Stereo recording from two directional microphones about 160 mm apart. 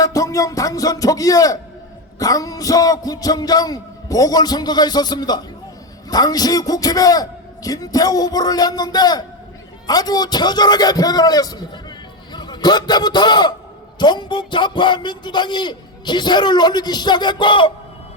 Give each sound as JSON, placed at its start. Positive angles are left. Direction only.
{"t": 0.0, "sound": "a man's voice", "side_deg": 20}